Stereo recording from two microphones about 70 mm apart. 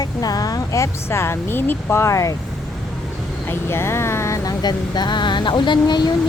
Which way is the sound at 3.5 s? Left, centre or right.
Left.